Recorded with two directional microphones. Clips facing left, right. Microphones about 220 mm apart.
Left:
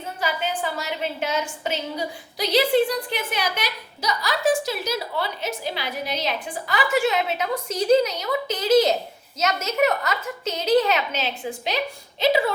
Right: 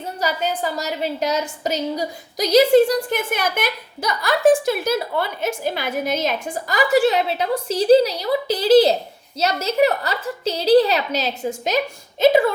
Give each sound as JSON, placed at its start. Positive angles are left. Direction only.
{"t": 0.2, "sound": "a woman's voice", "side_deg": -40}